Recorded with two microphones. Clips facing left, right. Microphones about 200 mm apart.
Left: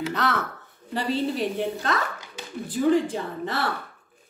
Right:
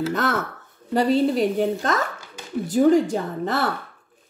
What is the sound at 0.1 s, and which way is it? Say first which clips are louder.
Speech: right 3 dB; 45° right (ahead or behind).